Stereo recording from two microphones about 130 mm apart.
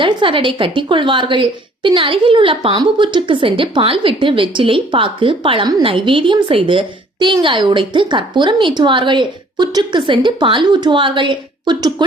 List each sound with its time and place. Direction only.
0.0 s a woman's voice: 40° right (ahead or behind)